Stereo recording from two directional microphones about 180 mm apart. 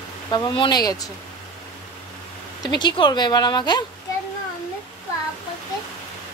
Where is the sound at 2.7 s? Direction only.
25° left (ahead or behind).